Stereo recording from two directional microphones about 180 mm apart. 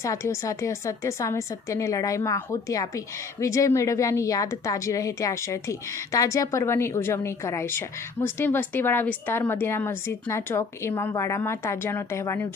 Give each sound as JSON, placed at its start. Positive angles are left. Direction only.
{"t": 0.0, "sound": "a woman's voice", "side_deg": 15}